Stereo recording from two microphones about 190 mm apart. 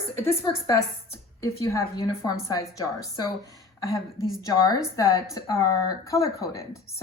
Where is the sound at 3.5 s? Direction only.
20° left (ahead or behind).